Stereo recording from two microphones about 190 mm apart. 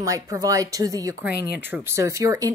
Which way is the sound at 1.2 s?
55° left (ahead or behind).